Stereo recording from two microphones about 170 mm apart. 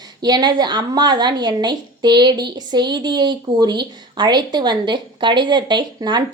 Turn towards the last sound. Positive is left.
turn(degrees=-25)  # may be behind; listen again after turning